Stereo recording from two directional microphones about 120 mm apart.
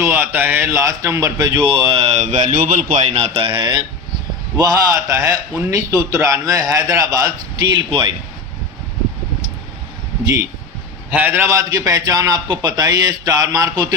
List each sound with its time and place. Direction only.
0.0 s a man's voice: 15° right (ahead or behind)
1.6 s a man's voice: 45° right (ahead or behind); by 7.3 s 30° right (ahead or behind)
11.1 s a man's voice: 15° right (ahead or behind); by 13.8 s 30° right (ahead or behind)